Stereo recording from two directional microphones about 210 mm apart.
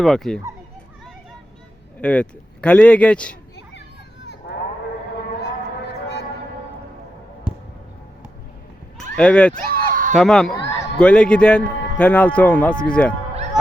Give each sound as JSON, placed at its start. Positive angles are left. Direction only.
{"t": 0.0, "sound": "a man's voice", "side_deg": 0}
{"t": 2.0, "sound": "a man's voice", "side_deg": 5}
{"t": 4.4, "sound": "a sound", "side_deg": 55}
{"t": 9.1, "sound": "a man's voice", "side_deg": 5}
{"t": 9.6, "sound": "a sound", "side_deg": -40}
{"t": 10.2, "sound": "a man's voice", "side_deg": 0}